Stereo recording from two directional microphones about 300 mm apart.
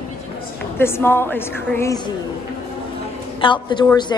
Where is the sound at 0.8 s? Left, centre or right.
Centre.